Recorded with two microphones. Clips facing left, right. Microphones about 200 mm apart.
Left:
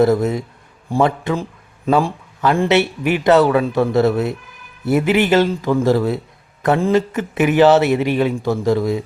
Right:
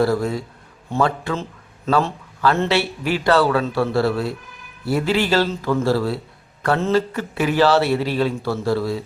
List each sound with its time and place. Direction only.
0.0 s a man's voice: 20° left (ahead or behind)